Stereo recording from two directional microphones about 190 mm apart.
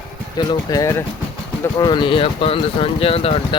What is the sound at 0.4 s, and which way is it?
Speech, 20° left (ahead or behind).